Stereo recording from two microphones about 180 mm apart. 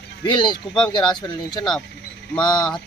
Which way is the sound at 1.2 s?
25° left (ahead or behind).